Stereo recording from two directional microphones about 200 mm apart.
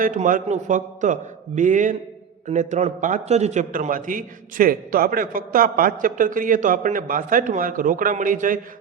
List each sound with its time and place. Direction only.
0.0 s a man's voice: 40° right (ahead or behind)